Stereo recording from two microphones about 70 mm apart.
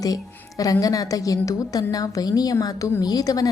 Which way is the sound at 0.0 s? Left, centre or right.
Left.